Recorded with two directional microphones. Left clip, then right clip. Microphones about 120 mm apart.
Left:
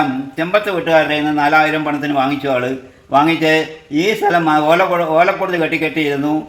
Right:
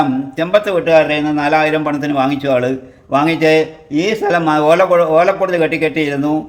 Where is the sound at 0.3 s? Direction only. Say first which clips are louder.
Right 3 dB; 45° right (ahead or behind).